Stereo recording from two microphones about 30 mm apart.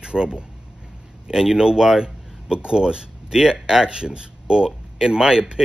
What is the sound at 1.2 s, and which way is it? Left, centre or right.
Speech, centre.